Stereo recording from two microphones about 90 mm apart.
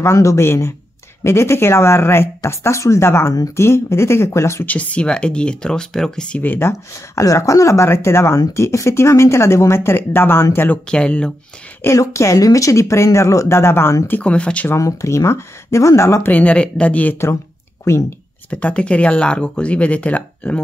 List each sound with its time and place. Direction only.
0.0 s speech: 35° left (ahead or behind)
4.6 s speech: 15° left (ahead or behind)
10.9 s speech: 10° left (ahead or behind)
11.8 s speech: 35° left (ahead or behind); by 14.7 s 15° left (ahead or behind)
14.8 s speech: 35° left (ahead or behind)
16.3 s speech: 15° left (ahead or behind)
17.9 s speech: 30° left (ahead or behind)
18.5 s speech: 15° left (ahead or behind)